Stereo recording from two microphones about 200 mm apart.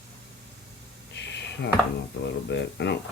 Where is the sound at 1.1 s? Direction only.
60° left (ahead or behind).